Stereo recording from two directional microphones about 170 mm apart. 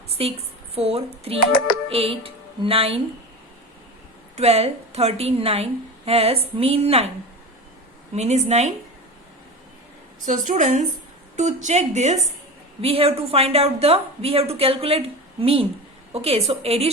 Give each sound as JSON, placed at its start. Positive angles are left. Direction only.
{"t": 0.2, "sound": "a woman's voice", "side_deg": -35}
{"t": 4.4, "sound": "a woman's voice", "side_deg": -35}
{"t": 8.1, "sound": "a woman's voice", "side_deg": -40}
{"t": 10.2, "sound": "a woman's voice", "side_deg": -50}